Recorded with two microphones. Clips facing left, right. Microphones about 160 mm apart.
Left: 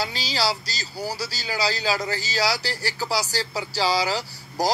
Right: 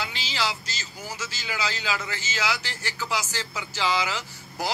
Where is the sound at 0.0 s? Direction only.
40° left (ahead or behind).